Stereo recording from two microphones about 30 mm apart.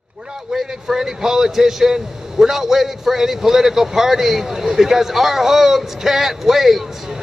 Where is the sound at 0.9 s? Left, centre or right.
Centre.